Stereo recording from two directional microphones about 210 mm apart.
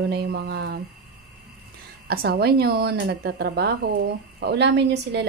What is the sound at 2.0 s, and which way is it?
A woman's voice, 45° right (ahead or behind).